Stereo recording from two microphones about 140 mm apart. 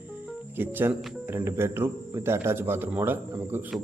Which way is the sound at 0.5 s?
15° right (ahead or behind).